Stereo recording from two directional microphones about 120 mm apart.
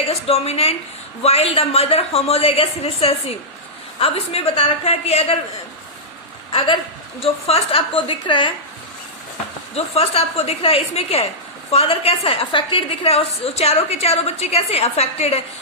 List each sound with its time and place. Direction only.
0.1 s a woman's voice: 60° left (ahead or behind)
6.5 s a woman's voice: 50° left (ahead or behind)
9.7 s a woman's voice: 55° left (ahead or behind)